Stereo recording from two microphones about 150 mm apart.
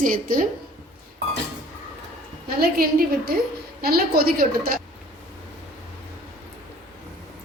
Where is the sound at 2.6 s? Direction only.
90° right.